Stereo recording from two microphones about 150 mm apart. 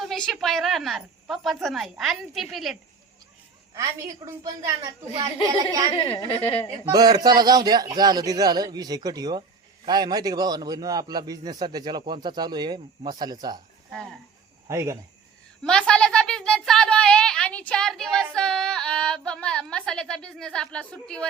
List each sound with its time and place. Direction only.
0.0 s a woman's voice: centre (ahead or behind)
3.8 s a man's voice: 20° right (ahead or behind)
6.1 s a woman's voice: 35° left (ahead or behind)
6.8 s a man's voice: 25° right (ahead or behind)
13.9 s a woman's voice: centre (ahead or behind)
14.7 s a man's voice: 20° right (ahead or behind)
15.6 s a woman's voice: 5° left (ahead or behind)